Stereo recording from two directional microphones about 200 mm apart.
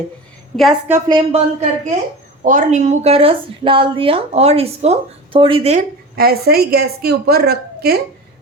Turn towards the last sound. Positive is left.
turn(degrees=-50)  # may be behind; listen again after turning